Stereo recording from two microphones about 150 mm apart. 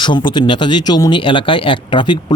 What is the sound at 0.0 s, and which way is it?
Speech, 35° left (ahead or behind).